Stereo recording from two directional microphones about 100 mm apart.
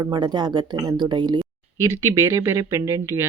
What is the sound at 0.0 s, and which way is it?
Speech, 45° right (ahead or behind).